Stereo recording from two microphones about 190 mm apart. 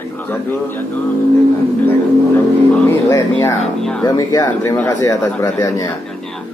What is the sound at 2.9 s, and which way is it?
Speech, 15° left (ahead or behind).